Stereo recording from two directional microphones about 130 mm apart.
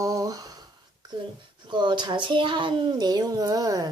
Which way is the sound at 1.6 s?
35° right (ahead or behind).